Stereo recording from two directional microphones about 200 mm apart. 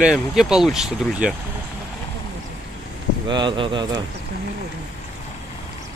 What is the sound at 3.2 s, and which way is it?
Speech, 25° right (ahead or behind).